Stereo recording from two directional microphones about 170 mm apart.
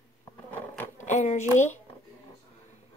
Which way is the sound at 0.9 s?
45° left (ahead or behind).